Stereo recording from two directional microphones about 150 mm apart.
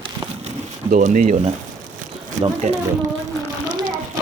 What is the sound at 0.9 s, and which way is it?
Speech, 60° right (ahead or behind).